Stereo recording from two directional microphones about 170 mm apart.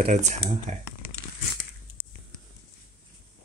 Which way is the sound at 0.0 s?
45° right (ahead or behind).